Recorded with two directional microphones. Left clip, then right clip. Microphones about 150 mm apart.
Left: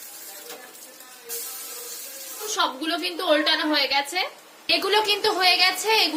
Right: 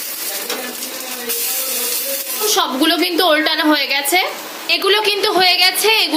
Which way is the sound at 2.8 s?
25° right (ahead or behind).